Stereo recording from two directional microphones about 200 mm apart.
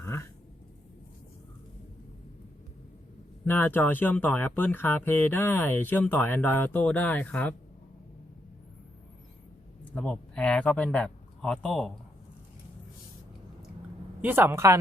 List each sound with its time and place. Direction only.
0.0 s a sound: 10° left (ahead or behind)
3.4 s speech: 10° left (ahead or behind)
9.9 s speech: 5° left (ahead or behind)
14.2 s speech: 10° right (ahead or behind)